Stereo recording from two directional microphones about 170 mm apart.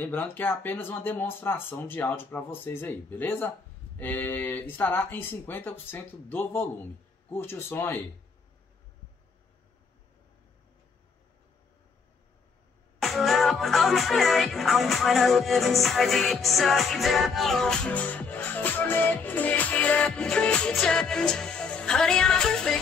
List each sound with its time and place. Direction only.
0.0 s speech: 10° left (ahead or behind)
13.0 s music: centre (ahead or behind)